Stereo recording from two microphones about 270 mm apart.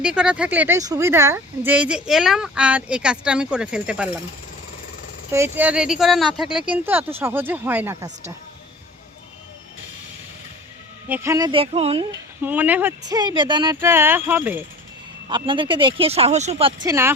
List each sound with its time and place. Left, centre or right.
0.0 s a woman's voice: centre
5.3 s speech: centre
11.1 s speech: centre
12.4 s speech: centre